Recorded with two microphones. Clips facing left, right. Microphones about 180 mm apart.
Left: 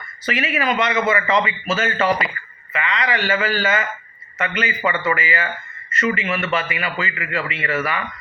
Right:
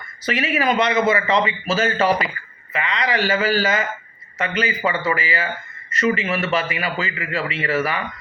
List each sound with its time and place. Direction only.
0.3 s a man's voice: 35° right (ahead or behind)